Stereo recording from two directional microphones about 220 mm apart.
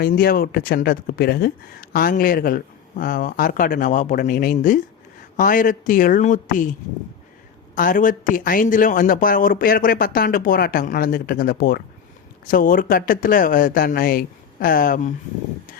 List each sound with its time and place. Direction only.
0.0 s speech: 45° left (ahead or behind)
7.8 s speech: 40° left (ahead or behind)